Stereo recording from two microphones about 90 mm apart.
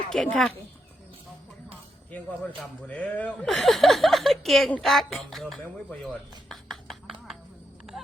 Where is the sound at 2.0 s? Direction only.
15° left (ahead or behind).